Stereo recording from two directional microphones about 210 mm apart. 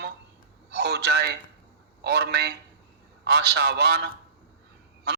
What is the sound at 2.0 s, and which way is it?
A man's voice, 50° right (ahead or behind).